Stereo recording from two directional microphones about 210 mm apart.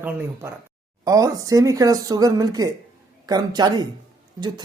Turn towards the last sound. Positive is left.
turn(degrees=-20)  # may be behind; listen again after turning